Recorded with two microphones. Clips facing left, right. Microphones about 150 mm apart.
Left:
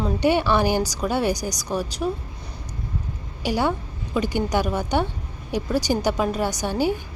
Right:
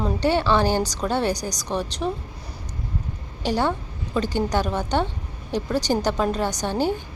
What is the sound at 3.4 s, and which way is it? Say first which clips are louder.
A woman's voice: even; 10° left (ahead or behind).